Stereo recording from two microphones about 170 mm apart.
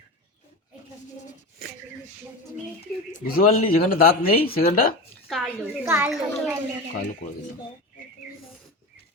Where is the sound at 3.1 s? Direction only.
60° left (ahead or behind).